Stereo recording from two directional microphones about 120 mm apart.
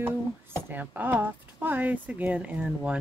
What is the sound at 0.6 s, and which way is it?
Speech, 15° right (ahead or behind).